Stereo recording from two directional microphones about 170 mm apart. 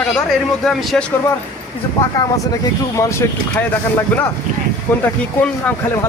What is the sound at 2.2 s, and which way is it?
A man's voice, 20° left (ahead or behind).